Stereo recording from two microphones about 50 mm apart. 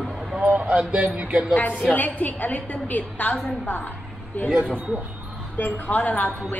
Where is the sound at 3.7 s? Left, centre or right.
Left.